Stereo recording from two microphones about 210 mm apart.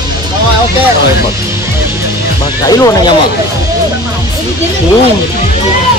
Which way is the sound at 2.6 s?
15° left (ahead or behind).